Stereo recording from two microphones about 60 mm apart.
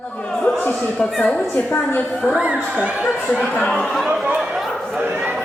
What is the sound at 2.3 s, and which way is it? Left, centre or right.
Speech, centre.